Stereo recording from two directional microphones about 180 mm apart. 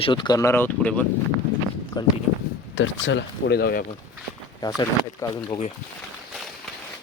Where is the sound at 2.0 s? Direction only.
25° left (ahead or behind).